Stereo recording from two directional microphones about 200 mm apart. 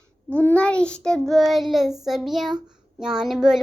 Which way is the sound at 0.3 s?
5° left (ahead or behind).